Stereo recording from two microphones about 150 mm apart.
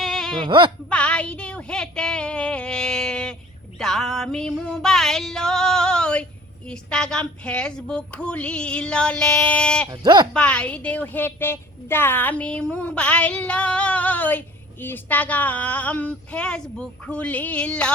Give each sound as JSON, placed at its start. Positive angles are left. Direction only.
{"t": 0.0, "sound": "a sound", "side_deg": 0}
{"t": 0.3, "sound": "speech", "side_deg": -30}
{"t": 0.9, "sound": "a woman's voice", "side_deg": 10}
{"t": 3.8, "sound": "music", "side_deg": 0}
{"t": 6.7, "sound": "a woman's voice", "side_deg": 5}
{"t": 9.9, "sound": "speech", "side_deg": -30}
{"t": 10.3, "sound": "a woman's voice", "side_deg": 10}